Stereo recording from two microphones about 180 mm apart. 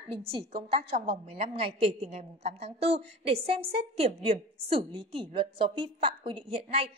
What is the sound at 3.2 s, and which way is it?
A woman's voice, 35° right (ahead or behind).